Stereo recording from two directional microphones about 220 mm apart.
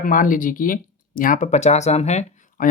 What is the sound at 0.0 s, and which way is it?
Speech, 40° left (ahead or behind).